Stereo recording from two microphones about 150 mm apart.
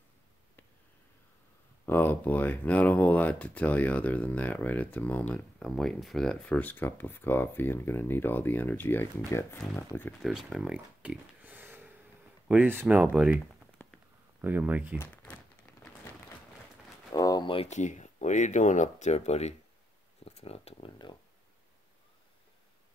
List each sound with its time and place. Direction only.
1.9 s speech: 15° left (ahead or behind)
10.2 s speech: 5° right (ahead or behind)
14.4 s speech: 10° right (ahead or behind)
15.0 s crumpling: 10° left (ahead or behind)
17.1 s a sound: 25° left (ahead or behind)
17.6 s speech: 50° left (ahead or behind); by 21.2 s 35° left (ahead or behind)